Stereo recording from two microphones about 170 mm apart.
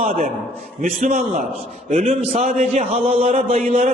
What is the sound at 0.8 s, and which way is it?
A man's voice, 50° right (ahead or behind).